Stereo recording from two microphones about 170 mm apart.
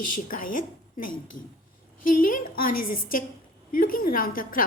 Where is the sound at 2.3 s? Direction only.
55° left (ahead or behind).